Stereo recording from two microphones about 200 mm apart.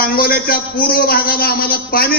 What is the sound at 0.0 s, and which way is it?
A man's voice, 50° left (ahead or behind).